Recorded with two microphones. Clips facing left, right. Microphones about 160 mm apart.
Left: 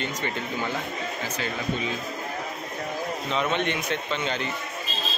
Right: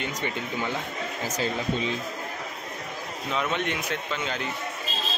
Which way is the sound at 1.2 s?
40° right (ahead or behind).